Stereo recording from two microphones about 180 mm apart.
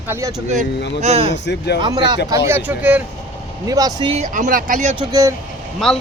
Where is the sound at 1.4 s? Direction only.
70° left (ahead or behind).